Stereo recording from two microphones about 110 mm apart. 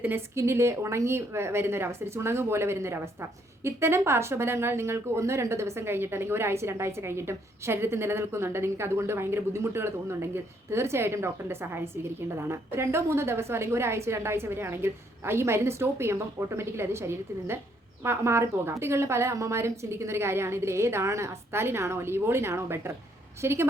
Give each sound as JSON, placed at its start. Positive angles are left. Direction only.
{"t": 0.0, "sound": "a woman's voice", "side_deg": -20}